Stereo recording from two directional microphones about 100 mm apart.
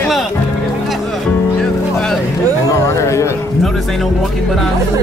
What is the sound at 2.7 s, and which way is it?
Speech, 30° left (ahead or behind).